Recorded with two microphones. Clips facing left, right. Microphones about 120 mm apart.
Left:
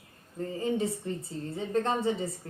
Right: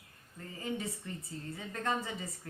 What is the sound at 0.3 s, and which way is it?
A woman's voice, 30° left (ahead or behind).